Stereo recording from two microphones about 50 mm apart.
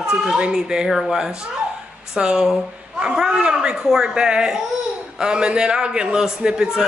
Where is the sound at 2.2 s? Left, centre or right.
Centre.